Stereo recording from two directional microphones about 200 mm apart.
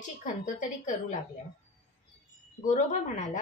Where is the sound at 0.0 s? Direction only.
40° left (ahead or behind).